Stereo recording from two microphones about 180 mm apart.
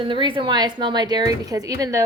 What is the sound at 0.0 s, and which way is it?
A woman's voice, 25° right (ahead or behind).